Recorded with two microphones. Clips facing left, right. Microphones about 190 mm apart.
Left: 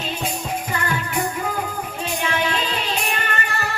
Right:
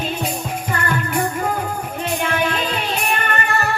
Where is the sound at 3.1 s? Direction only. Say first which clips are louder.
Right 4 dB; 50° right (ahead or behind).